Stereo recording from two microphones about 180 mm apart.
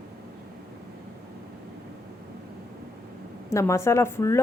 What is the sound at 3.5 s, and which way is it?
Speech, 15° left (ahead or behind).